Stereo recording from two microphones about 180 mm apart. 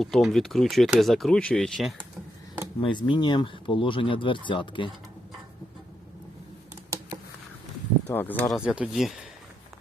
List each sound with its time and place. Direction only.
0.0 s speech: centre (ahead or behind)
2.8 s speech: 25° left (ahead or behind)
8.0 s speech: 10° left (ahead or behind)
8.5 s speech: 5° right (ahead or behind)